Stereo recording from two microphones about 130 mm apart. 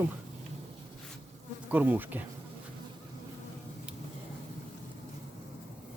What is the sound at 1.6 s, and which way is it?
Insect, 10° right (ahead or behind).